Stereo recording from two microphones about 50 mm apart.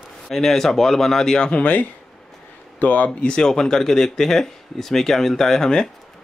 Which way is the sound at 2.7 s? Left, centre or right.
Left.